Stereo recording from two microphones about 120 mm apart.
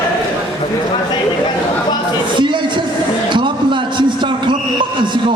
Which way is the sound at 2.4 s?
40° right (ahead or behind).